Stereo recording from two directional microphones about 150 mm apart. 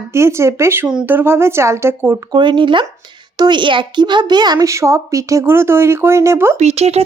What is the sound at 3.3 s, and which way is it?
A woman's voice, 30° right (ahead or behind).